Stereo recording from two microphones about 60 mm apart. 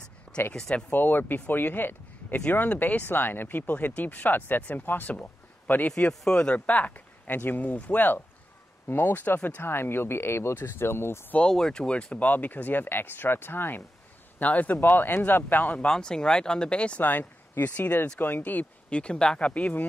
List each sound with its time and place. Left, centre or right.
0.5 s speech: centre
0.9 s speech: left
5.9 s speech: centre; by 11.3 s left
11.3 s speech: centre; by 15.9 s left
15.9 s speech: centre; by 18.7 s left
18.9 s speech: centre